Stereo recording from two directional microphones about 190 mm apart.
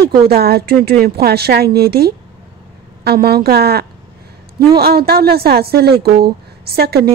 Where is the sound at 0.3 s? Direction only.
55° right (ahead or behind).